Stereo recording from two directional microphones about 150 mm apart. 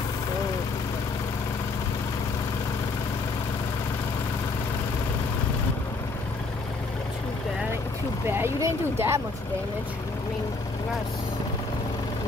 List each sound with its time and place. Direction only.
8.3 s speech: 15° right (ahead or behind)